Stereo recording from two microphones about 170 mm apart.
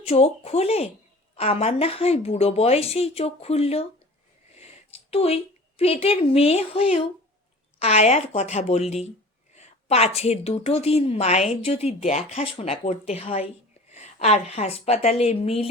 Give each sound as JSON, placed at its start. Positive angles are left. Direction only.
{"t": 0.0, "sound": "a woman's voice", "side_deg": 35}